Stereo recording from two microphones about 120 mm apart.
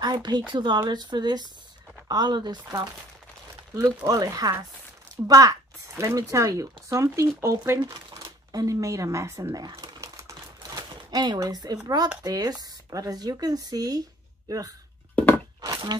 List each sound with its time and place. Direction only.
0.0 s speech: 35° right (ahead or behind)
4.0 s speech: 30° right (ahead or behind)
9.8 s crumpling: 30° right (ahead or behind)
12.2 s speech: 35° right (ahead or behind)
15.1 s a sound: 15° left (ahead or behind)
15.6 s a sound: 35° right (ahead or behind)